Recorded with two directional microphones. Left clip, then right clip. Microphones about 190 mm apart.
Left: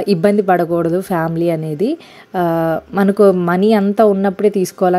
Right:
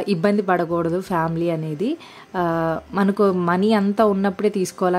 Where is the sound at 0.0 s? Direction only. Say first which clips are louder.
Left 7 dB; 20° left (ahead or behind).